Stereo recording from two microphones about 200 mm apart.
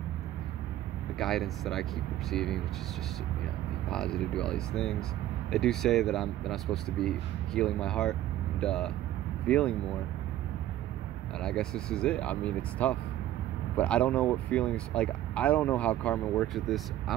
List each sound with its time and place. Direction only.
1.1 s speech: centre (ahead or behind)
3.9 s speech: 5° left (ahead or behind)
11.4 s speech: 5° left (ahead or behind)